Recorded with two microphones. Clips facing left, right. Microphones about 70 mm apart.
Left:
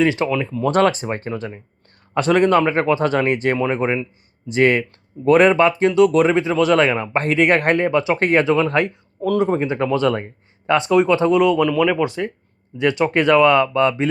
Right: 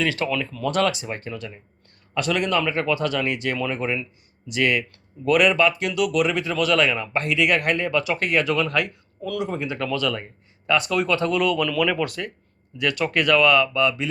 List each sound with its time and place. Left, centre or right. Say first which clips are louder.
0.0 s speech: left 6 dB; left
0.7 s speech: left 6 dB; left